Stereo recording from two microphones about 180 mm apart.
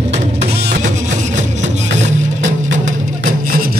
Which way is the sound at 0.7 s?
40° right (ahead or behind).